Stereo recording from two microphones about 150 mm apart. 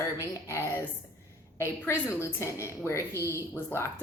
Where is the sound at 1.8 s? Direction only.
20° left (ahead or behind).